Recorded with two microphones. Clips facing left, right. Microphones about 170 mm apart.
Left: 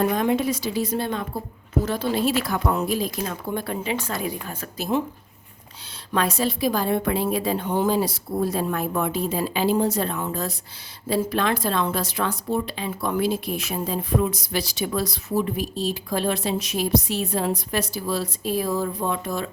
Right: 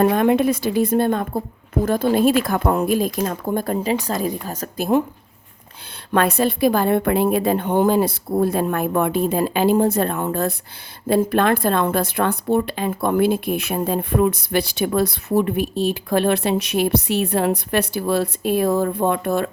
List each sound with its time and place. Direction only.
0.0 s a woman's voice: 60° right (ahead or behind); by 4.7 s 40° right (ahead or behind)
4.8 s speech: 55° right (ahead or behind)
6.1 s speech: 60° right (ahead or behind)